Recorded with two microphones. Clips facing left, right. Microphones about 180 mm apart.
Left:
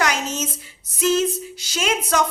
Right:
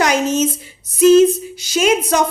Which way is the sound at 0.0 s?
15° right (ahead or behind).